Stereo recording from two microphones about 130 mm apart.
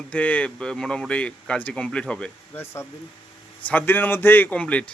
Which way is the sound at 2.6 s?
20° left (ahead or behind).